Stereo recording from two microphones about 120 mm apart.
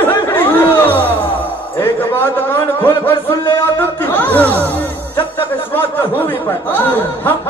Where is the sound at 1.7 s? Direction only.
20° left (ahead or behind).